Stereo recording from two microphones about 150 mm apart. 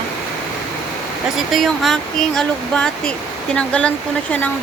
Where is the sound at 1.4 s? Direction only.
Centre (ahead or behind).